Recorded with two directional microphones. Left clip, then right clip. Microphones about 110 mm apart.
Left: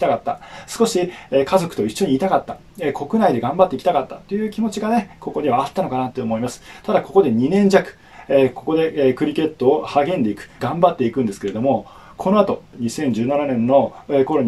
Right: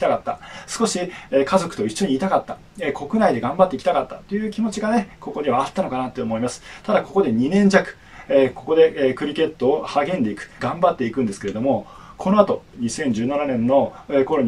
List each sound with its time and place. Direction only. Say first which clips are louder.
0.0 s speech: left 1 dB; 35° left (ahead or behind)